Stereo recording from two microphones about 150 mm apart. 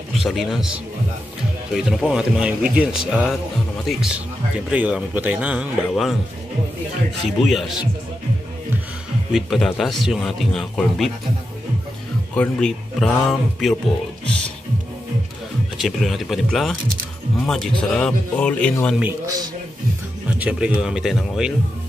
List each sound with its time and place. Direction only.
0.2 s a man's voice: centre (ahead or behind)
7.2 s a man's voice: centre (ahead or behind)
9.3 s a man's voice: centre (ahead or behind)
12.4 s a man's voice: 5° left (ahead or behind)
15.8 s a man's voice: centre (ahead or behind)
19.2 s speech: 25° right (ahead or behind)
20.2 s a man's voice: 5° right (ahead or behind)